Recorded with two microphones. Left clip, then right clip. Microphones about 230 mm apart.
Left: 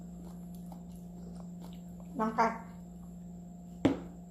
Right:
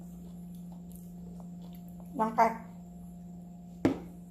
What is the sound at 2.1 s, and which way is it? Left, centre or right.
Speech, right.